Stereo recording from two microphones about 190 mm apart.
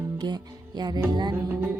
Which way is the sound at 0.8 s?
20° right (ahead or behind).